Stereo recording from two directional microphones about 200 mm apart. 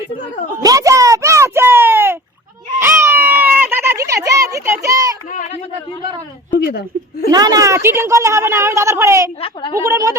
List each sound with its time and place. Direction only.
0.6 s a sound: 15° right (ahead or behind)
5.3 s a sound: 40° left (ahead or behind)
6.7 s chuckle: 50° left (ahead or behind)
7.3 s a woman's voice: 20° right (ahead or behind)
9.4 s a woman's voice: 25° left (ahead or behind)
9.7 s a woman's voice: 15° right (ahead or behind)